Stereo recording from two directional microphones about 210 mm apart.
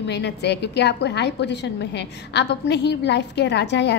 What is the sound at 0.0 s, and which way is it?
A woman's voice, 55° left (ahead or behind).